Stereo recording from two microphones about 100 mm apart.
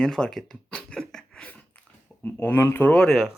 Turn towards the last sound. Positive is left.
turn(degrees=5)  # may be behind; listen again after turning